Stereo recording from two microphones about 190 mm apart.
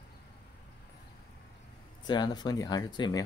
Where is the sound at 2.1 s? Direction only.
20° left (ahead or behind).